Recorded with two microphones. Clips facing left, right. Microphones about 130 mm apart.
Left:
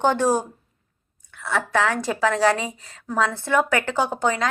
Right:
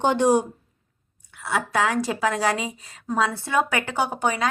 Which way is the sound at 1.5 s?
15° right (ahead or behind).